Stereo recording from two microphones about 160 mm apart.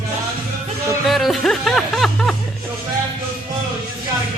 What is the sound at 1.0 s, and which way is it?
Speech, centre (ahead or behind).